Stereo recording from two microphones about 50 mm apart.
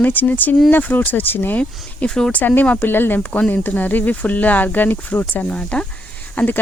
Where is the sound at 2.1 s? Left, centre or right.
Centre.